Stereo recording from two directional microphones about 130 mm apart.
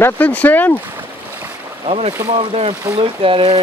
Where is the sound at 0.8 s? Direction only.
15° right (ahead or behind).